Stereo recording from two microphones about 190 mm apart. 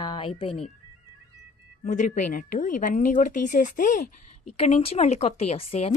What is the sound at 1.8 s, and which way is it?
Speech, 40° left (ahead or behind).